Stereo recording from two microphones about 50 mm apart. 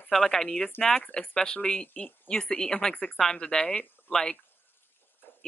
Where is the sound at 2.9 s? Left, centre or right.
Left.